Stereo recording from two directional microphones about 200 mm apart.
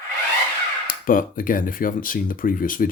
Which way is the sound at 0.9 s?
45° left (ahead or behind).